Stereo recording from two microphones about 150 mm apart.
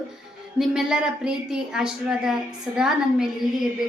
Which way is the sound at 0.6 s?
5° right (ahead or behind).